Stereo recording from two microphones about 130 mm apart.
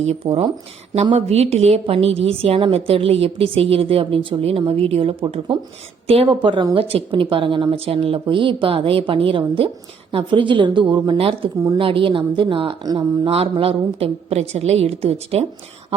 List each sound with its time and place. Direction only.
0.3 s speech: 40° right (ahead or behind)
1.1 s a woman's voice: 55° right (ahead or behind)
5.2 s a woman's voice: 40° right (ahead or behind)
13.3 s a woman's voice: 45° right (ahead or behind)